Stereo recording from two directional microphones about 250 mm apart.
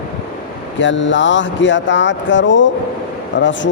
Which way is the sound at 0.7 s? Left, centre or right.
Left.